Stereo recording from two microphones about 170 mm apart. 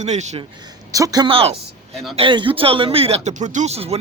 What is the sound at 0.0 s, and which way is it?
Speech, 40° right (ahead or behind).